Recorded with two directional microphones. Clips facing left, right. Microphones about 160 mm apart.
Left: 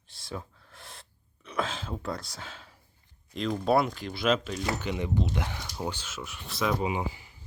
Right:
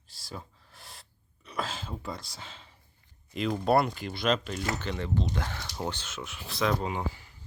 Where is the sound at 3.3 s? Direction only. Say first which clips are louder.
Even; 5° right (ahead or behind); by 5.6 s 15° left (ahead or behind).